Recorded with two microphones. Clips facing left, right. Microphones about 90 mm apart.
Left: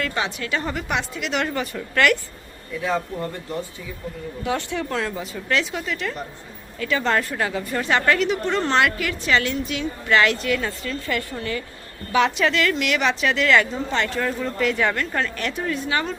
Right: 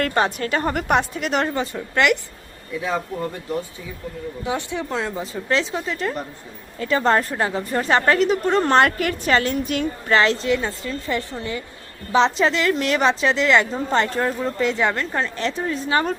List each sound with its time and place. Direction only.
0.0 s a woman's voice: 45° right (ahead or behind)
1.5 s speech: 25° right (ahead or behind)
4.4 s a woman's voice: 20° right (ahead or behind); by 9.8 s 45° right (ahead or behind)
10.1 s a woman's voice: 30° right (ahead or behind)
13.9 s a woman's voice: 35° right (ahead or behind)